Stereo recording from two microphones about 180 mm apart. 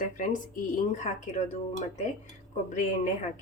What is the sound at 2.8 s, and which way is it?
Speech, 40° left (ahead or behind).